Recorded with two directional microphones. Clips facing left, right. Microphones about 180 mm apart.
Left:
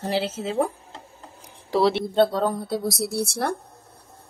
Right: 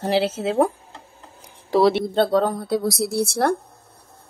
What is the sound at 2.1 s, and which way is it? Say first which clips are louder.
Speech: right 1 dB; 90° right.